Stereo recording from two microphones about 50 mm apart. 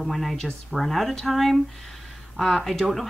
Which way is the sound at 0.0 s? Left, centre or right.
Centre.